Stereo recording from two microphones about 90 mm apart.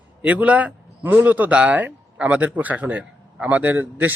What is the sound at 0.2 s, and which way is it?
A man's voice, 15° right (ahead or behind).